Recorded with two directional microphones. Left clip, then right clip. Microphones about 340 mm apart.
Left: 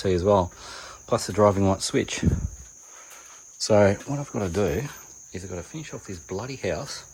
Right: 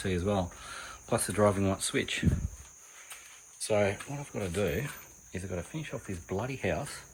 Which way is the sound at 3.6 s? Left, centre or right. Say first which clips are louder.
Left 9 dB; left.